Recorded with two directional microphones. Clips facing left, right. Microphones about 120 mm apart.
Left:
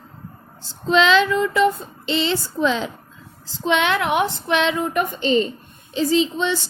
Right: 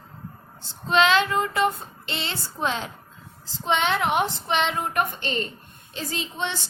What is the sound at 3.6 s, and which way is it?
Speech, 70° left (ahead or behind).